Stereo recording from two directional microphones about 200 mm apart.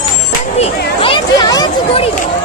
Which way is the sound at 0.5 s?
30° left (ahead or behind).